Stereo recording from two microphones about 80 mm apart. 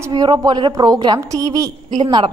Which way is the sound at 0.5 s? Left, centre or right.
Right.